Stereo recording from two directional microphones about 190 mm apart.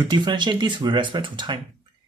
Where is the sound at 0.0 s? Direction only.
25° right (ahead or behind).